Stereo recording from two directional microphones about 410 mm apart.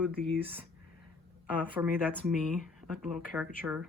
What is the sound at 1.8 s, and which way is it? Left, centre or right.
Speech, centre.